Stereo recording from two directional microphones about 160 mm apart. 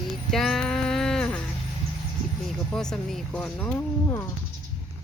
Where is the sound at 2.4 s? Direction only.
5° left (ahead or behind).